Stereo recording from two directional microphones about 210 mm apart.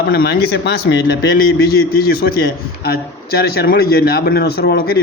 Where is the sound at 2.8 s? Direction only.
45° left (ahead or behind).